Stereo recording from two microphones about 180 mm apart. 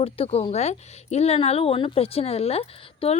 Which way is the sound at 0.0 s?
35° left (ahead or behind).